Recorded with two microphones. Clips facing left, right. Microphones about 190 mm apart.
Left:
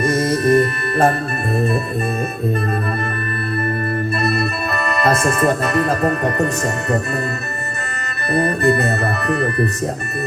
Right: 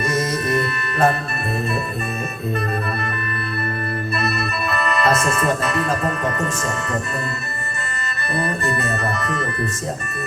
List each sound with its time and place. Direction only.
0.0 s music: 50° left (ahead or behind)
4.3 s speech: 50° left (ahead or behind)
8.3 s music: 60° left (ahead or behind)